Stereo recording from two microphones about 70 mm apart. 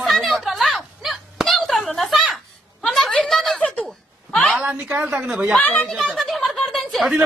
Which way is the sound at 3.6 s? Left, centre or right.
Centre.